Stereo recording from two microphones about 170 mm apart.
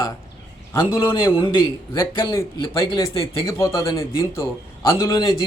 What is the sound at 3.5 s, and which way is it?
A man's voice, 15° left (ahead or behind).